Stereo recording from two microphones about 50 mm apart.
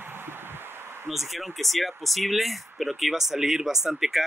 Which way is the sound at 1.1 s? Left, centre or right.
Centre.